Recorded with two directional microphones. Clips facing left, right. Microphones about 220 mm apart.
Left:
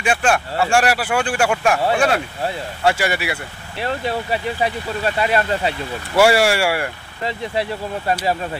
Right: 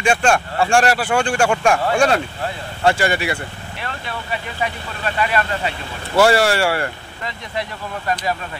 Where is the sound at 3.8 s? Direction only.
35° left (ahead or behind).